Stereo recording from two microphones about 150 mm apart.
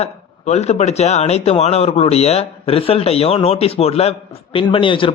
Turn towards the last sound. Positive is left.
turn(degrees=35)  # may be behind; listen again after turning